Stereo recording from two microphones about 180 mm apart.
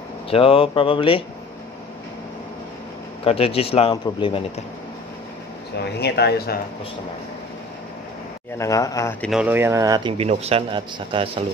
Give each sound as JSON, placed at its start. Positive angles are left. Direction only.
{"t": 0.3, "sound": "speech", "side_deg": 30}
{"t": 3.3, "sound": "speech", "side_deg": 35}
{"t": 5.9, "sound": "speech", "side_deg": 65}
{"t": 8.5, "sound": "speech", "side_deg": 20}
{"t": 9.2, "sound": "speech", "side_deg": -5}
{"t": 10.1, "sound": "a man's voice", "side_deg": -35}